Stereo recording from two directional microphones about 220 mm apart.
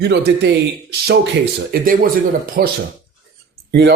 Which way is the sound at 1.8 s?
40° right (ahead or behind).